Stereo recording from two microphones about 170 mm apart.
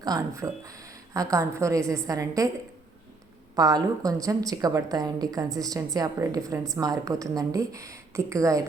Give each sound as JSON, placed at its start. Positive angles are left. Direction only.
{"t": 0.0, "sound": "a woman's voice", "side_deg": -20}
{"t": 3.5, "sound": "a woman's voice", "side_deg": -20}